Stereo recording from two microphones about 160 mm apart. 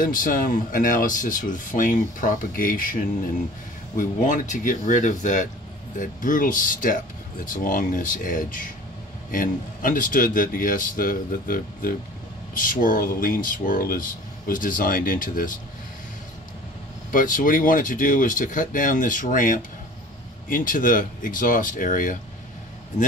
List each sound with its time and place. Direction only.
0.0 s speech: 60° left (ahead or behind)
17.1 s speech: 55° left (ahead or behind)